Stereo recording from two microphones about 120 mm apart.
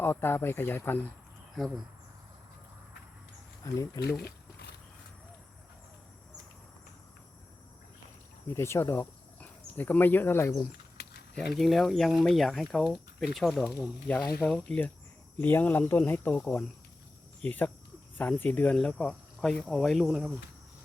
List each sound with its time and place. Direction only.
0.0 s speech: 20° left (ahead or behind)
1.5 s speech: centre (ahead or behind)
3.6 s speech: 25° left (ahead or behind)
8.4 s speech: 25° left (ahead or behind)
11.3 s speech: centre (ahead or behind)